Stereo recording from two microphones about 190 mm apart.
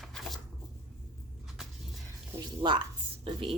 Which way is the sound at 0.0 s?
Centre (ahead or behind).